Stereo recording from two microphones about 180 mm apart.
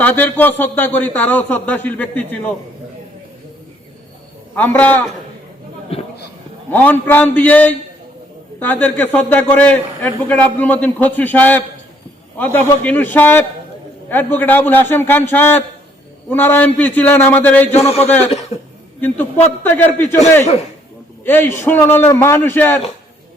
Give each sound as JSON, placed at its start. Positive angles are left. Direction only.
{"t": 0.0, "sound": "a man's voice", "side_deg": 10}
{"t": 4.5, "sound": "a man's voice", "side_deg": 10}
{"t": 5.9, "sound": "a sound", "side_deg": 35}
{"t": 6.7, "sound": "a man's voice", "side_deg": 10}
{"t": 18.9, "sound": "a man's voice", "side_deg": 10}
{"t": 21.2, "sound": "a man's voice", "side_deg": 10}